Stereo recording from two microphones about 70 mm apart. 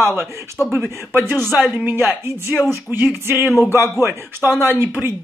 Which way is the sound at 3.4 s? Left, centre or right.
Centre.